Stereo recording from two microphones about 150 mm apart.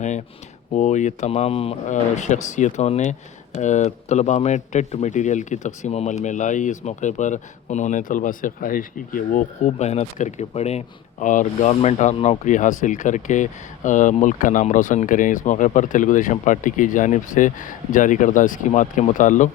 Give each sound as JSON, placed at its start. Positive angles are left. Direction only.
{"t": 0.7, "sound": "speech", "side_deg": 55}